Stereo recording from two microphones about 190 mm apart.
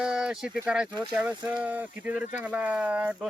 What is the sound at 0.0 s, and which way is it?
Speech, 5° right (ahead or behind).